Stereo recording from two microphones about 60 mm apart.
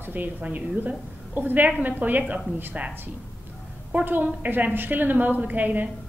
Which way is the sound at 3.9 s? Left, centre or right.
Right.